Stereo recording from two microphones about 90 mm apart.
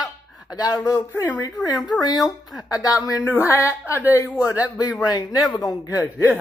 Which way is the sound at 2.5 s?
45° left (ahead or behind).